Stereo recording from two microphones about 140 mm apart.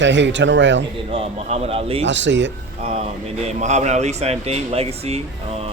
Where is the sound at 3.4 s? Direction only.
55° right (ahead or behind).